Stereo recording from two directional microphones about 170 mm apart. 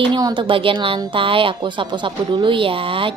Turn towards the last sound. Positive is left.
turn(degrees=-30)  # may be behind; listen again after turning